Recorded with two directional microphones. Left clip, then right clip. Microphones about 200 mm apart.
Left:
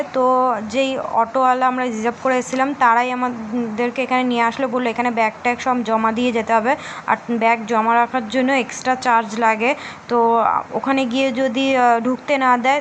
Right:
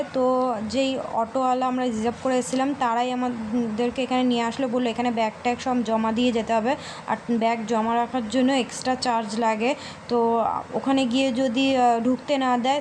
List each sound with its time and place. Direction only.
0.5 s a woman's voice: 5° left (ahead or behind)
10.2 s speech: 25° left (ahead or behind)
10.8 s a woman's voice: 5° left (ahead or behind)